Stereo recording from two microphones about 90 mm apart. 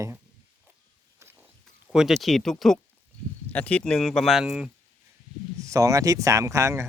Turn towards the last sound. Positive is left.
turn(degrees=-35)  # may be behind; listen again after turning